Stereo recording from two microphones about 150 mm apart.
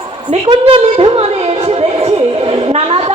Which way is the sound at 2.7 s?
45° right (ahead or behind).